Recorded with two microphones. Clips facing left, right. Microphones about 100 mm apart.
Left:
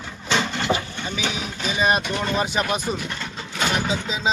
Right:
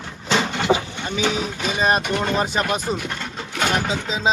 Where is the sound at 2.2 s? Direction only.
Centre (ahead or behind).